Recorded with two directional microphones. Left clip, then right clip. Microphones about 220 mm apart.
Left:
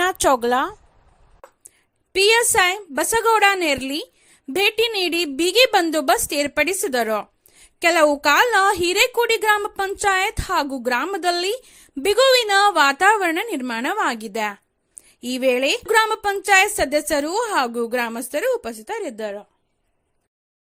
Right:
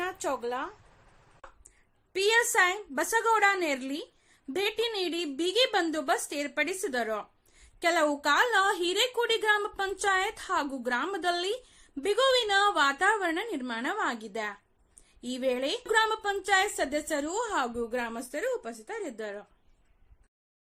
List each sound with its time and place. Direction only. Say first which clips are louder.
0.0 s speech: left 14 dB; 45° left (ahead or behind)
2.1 s a woman's voice: left 9 dB; 40° left (ahead or behind)